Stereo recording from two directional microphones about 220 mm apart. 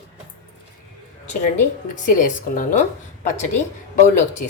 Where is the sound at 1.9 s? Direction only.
35° left (ahead or behind).